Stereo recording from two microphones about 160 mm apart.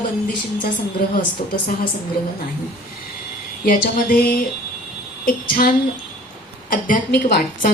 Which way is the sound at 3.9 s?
65° left (ahead or behind).